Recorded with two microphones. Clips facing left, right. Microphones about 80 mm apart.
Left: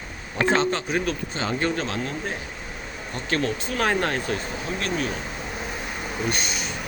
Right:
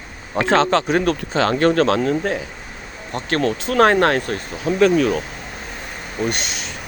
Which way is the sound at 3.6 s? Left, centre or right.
Right.